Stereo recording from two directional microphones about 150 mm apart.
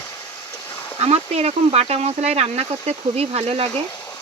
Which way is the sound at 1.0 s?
45° right (ahead or behind).